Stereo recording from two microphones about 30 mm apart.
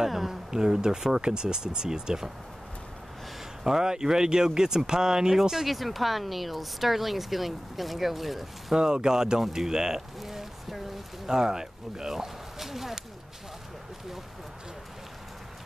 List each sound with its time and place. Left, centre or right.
0.0 s speech: centre
0.5 s speech: right
3.6 s speech: centre
5.7 s speech: centre
8.7 s speech: right